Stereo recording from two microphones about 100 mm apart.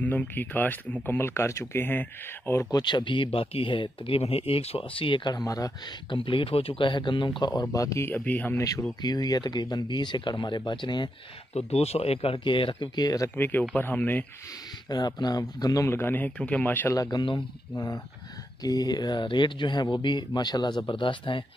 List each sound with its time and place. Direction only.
0.0 s speech: 15° left (ahead or behind)
2.7 s speech: 50° left (ahead or behind)
5.3 s speech: 40° left (ahead or behind)
6.0 s speech: 60° left (ahead or behind)
7.7 s speech: 30° left (ahead or behind)
8.1 s speech: 15° left (ahead or behind)
8.5 s speech: 35° left (ahead or behind); by 11.1 s 50° left (ahead or behind)
11.5 s speech: 90° left; by 13.3 s 40° left (ahead or behind)
13.4 s speech: 20° left (ahead or behind)
14.9 s speech: 45° left (ahead or behind)
15.9 s speech: 20° left (ahead or behind)
16.9 s speech: 35° left (ahead or behind); by 21.5 s 55° left (ahead or behind)